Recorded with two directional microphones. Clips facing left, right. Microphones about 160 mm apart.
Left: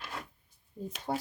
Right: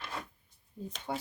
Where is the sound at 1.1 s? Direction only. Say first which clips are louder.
Left 3 dB; 35° left (ahead or behind).